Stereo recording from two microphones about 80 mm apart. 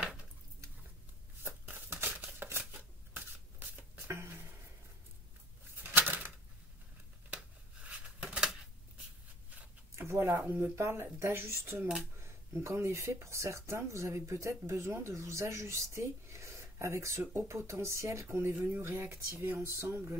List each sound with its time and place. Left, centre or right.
1.7 s crumpling: right
2.8 s shuffling cards: right
5.9 s a sound: right
7.2 s a sound: centre
9.9 s speech: right
10.8 s speech: right